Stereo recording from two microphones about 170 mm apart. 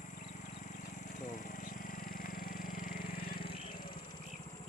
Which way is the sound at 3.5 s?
30° left (ahead or behind).